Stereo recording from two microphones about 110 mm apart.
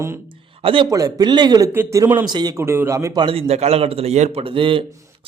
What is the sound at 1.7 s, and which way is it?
Speech, 20° right (ahead or behind).